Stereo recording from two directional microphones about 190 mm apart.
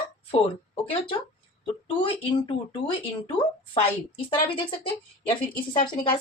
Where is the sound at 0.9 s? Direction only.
30° left (ahead or behind).